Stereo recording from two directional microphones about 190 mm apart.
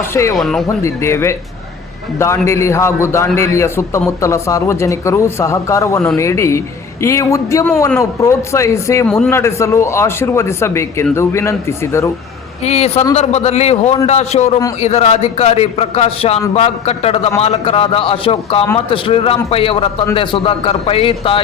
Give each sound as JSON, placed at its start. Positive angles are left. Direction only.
{"t": 0.0, "sound": "a man's voice", "side_deg": 15}
{"t": 0.3, "sound": "a man's voice", "side_deg": 0}
{"t": 0.8, "sound": "a man's voice", "side_deg": 15}
{"t": 9.0, "sound": "a man's voice", "side_deg": 5}
{"t": 9.3, "sound": "a man's voice", "side_deg": 15}
{"t": 12.6, "sound": "a man's voice", "side_deg": 35}